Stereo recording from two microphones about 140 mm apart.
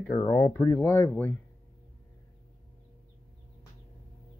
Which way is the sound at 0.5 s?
25° left (ahead or behind).